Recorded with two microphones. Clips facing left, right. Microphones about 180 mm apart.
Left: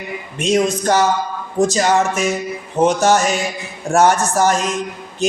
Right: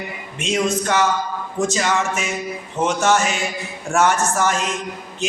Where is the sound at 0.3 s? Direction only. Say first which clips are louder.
Left 4 dB; 40° left (ahead or behind).